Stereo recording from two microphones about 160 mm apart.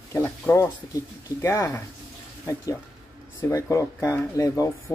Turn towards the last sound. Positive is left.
turn(degrees=20)  # may be behind; listen again after turning